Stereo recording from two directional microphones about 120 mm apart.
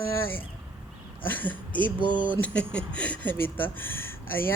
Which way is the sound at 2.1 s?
45° right (ahead or behind).